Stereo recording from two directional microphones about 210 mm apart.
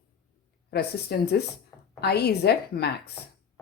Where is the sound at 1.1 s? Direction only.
50° left (ahead or behind).